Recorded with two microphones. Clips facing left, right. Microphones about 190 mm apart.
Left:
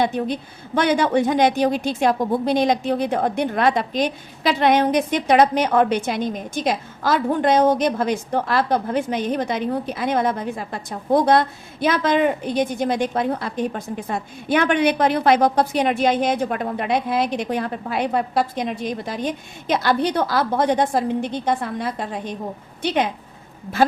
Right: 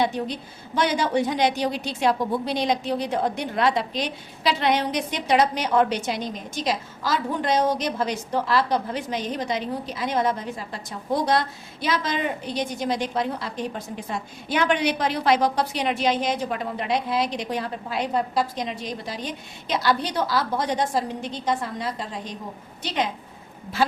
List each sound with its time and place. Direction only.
0.0 s a woman's voice: 55° left (ahead or behind)